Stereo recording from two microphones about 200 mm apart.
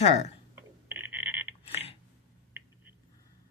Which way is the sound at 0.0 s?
35° left (ahead or behind).